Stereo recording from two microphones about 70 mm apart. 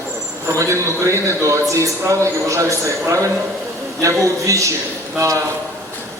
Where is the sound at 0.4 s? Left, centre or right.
Right.